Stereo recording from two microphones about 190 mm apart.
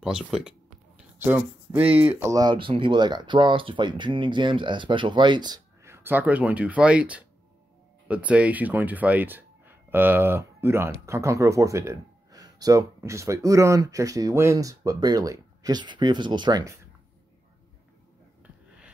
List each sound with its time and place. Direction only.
0.0 s speech: 5° right (ahead or behind); by 16.7 s 20° right (ahead or behind)